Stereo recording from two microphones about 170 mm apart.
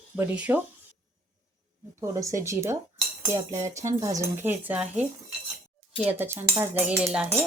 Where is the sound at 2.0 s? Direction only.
20° right (ahead or behind).